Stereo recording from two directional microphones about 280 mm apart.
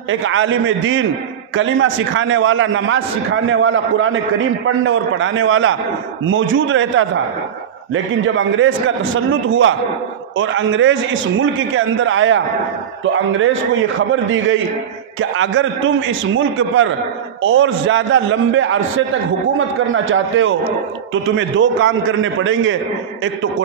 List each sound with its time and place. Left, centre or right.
0.1 s a man's voice: right
13.4 s a man's voice: right
19.9 s a man's voice: right